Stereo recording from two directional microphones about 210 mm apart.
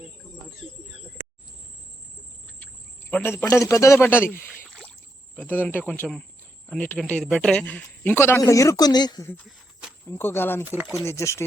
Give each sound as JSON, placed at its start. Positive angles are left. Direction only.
{"t": 3.1, "sound": "a man's voice", "side_deg": 10}
{"t": 10.6, "sound": "speech", "side_deg": -10}
{"t": 11.0, "sound": "a man's voice", "side_deg": 15}